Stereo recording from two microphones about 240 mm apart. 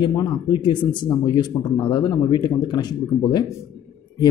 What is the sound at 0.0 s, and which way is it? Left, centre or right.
Speech, centre.